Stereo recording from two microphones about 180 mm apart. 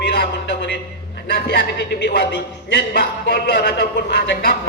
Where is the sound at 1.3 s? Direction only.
65° left (ahead or behind).